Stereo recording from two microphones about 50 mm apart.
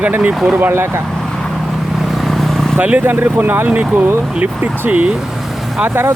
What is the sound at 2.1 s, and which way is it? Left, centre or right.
Vehicle, centre.